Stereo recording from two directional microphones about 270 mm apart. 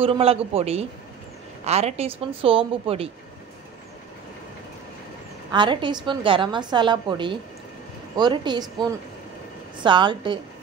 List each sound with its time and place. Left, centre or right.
0.0 s speech: right
5.5 s a woman's voice: centre